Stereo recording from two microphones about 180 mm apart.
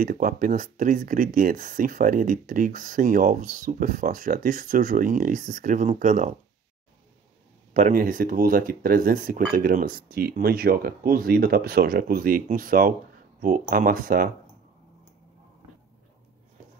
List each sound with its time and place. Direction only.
0.0 s speech: 50° right (ahead or behind)
7.7 s speech: 45° right (ahead or behind)